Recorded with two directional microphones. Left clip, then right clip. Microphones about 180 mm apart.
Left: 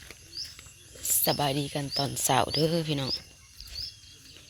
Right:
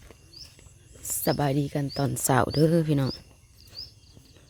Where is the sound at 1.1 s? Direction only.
40° right (ahead or behind).